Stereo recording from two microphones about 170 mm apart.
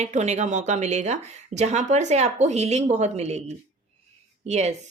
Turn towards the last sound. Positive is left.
turn(degrees=-40)  # may be behind; listen again after turning